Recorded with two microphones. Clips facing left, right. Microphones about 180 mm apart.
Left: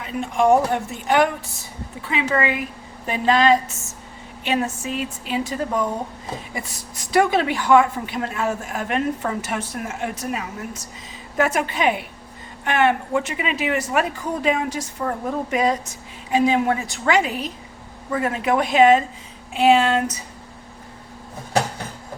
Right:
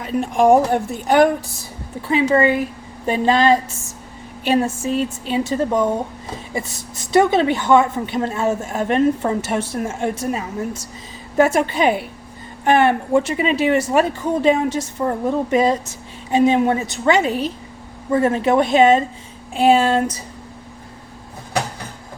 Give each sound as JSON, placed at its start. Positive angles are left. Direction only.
{"t": 0.7, "sound": "a woman's voice", "side_deg": -40}